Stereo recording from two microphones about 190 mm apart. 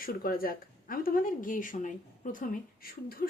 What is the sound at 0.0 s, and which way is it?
Speech, 50° left (ahead or behind).